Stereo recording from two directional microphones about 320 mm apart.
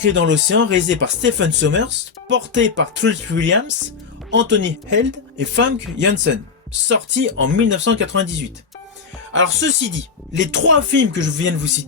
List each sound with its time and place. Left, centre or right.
0.0 s speech: right
9.3 s speech: right